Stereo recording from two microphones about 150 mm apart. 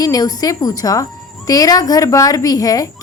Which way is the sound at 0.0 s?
25° left (ahead or behind).